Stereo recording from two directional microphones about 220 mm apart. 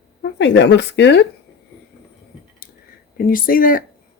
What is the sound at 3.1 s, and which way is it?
Speech, 40° left (ahead or behind).